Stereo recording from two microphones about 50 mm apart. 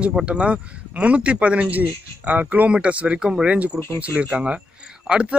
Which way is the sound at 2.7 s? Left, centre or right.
Right.